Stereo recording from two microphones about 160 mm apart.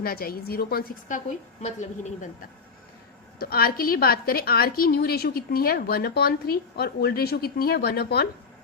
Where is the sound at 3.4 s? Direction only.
70° left (ahead or behind).